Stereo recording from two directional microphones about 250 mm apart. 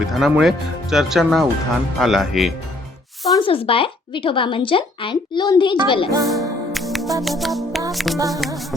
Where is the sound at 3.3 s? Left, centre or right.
Left.